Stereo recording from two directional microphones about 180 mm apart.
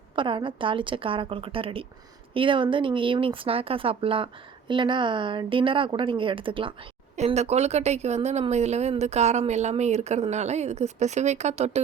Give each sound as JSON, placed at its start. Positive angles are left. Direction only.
{"t": 0.2, "sound": "a woman's voice", "side_deg": -25}